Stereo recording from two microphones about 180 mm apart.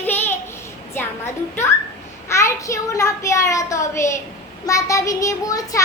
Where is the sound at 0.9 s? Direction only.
10° left (ahead or behind).